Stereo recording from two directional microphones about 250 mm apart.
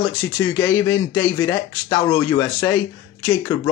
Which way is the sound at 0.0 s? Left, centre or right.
Centre.